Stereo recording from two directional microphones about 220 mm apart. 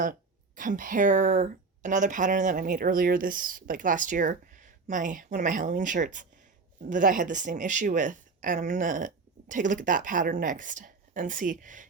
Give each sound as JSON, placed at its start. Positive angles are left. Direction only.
{"t": 0.0, "sound": "speech", "side_deg": -35}